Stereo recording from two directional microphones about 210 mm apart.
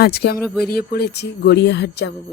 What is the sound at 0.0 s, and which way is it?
Speech, 50° left (ahead or behind).